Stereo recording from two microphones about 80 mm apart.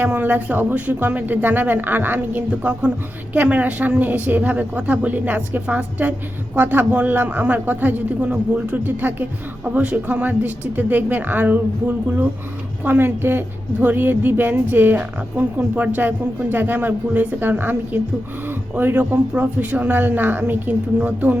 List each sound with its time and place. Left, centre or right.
0.0 s a woman's voice: right